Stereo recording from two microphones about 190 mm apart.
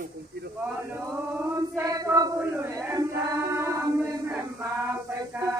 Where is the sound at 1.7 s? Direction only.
20° right (ahead or behind).